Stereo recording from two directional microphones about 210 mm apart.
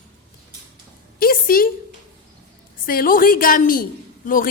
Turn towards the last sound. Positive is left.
turn(degrees=40)  # may be behind; listen again after turning